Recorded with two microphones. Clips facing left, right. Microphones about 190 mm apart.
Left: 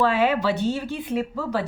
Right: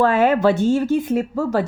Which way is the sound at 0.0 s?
50° right (ahead or behind).